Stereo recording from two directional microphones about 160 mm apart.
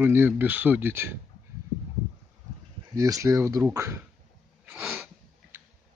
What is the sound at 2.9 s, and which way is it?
Speech, 20° right (ahead or behind).